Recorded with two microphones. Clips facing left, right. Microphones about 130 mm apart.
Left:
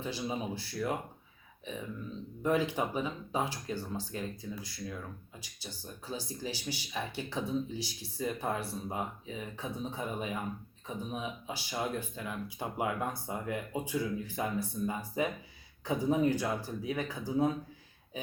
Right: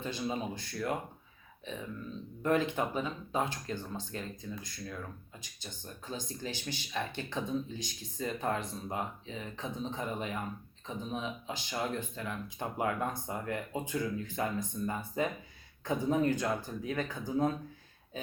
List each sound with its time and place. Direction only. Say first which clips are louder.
0.0 s speech: even; 10° left (ahead or behind)
2.4 s speech: even; 10° left (ahead or behind)